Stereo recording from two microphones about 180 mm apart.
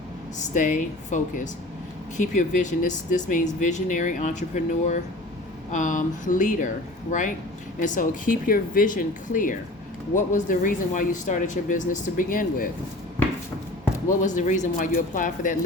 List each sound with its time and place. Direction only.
0.3 s speech: 45° left (ahead or behind)
14.2 s speech: 45° left (ahead or behind)